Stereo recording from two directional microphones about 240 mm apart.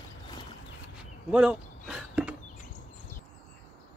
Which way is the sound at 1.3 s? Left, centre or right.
Centre.